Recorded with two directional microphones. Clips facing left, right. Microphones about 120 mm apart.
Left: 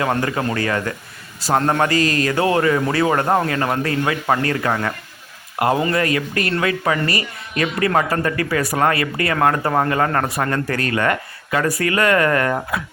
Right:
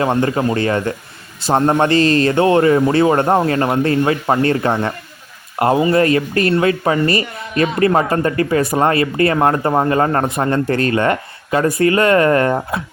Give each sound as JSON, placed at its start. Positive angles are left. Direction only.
{"t": 0.0, "sound": "speech", "side_deg": -25}